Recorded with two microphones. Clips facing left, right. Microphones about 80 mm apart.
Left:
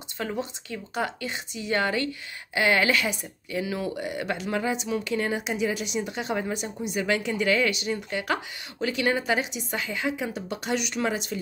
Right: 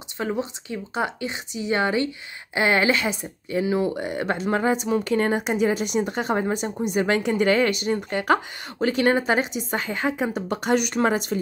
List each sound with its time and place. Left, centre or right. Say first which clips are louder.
0.2 s a woman's voice: right 4 dB; right